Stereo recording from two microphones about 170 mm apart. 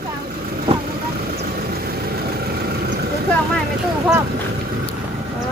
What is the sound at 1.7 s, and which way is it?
Vehicle, 60° right (ahead or behind).